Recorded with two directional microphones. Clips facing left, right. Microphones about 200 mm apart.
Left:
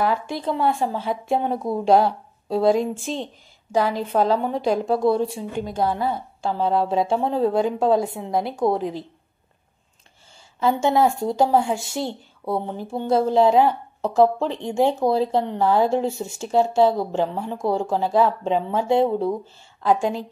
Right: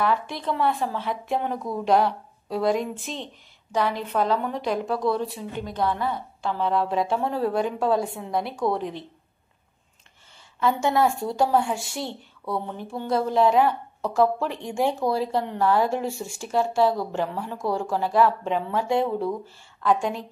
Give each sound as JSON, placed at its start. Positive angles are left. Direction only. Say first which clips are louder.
{"t": 0.4, "sound": "speech", "louder": "left 3 dB", "side_deg": 30}
{"t": 10.6, "sound": "speech", "louder": "left 3 dB", "side_deg": 25}